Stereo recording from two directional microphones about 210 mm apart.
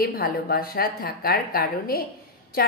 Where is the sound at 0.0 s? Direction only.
45° left (ahead or behind).